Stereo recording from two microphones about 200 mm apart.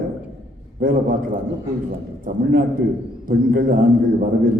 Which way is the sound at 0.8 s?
45° right (ahead or behind).